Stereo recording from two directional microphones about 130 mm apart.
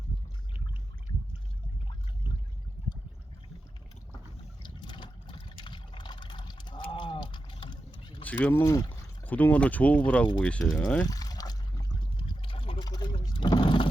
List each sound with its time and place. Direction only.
4.6 s boat: 35° left (ahead or behind)
8.2 s speech: 10° left (ahead or behind)
8.7 s speech: 30° left (ahead or behind)
9.2 s speech: 10° left (ahead or behind)
11.1 s water: 30° left (ahead or behind)